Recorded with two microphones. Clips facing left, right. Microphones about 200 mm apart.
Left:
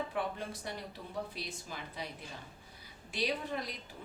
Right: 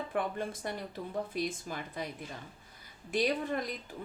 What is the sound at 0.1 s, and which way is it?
Speech, 50° right (ahead or behind).